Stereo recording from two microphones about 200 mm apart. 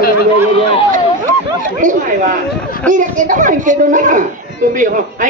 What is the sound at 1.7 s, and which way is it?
A man's voice, 40° right (ahead or behind).